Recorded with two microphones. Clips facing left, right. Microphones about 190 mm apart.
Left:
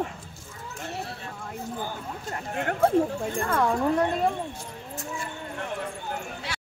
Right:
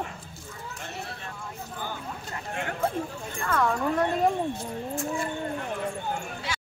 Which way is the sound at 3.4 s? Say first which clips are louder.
Left 1 dB; 25° left (ahead or behind).